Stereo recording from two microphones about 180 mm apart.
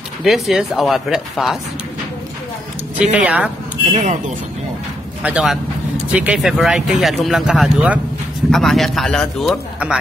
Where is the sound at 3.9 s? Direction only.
40° right (ahead or behind).